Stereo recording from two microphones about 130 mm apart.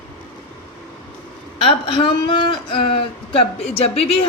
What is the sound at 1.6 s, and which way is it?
A woman's voice, 40° left (ahead or behind).